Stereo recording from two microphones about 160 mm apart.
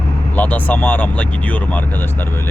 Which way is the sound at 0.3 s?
10° left (ahead or behind).